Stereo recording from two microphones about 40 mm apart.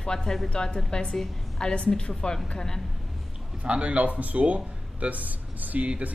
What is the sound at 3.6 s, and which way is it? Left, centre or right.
Speech, right.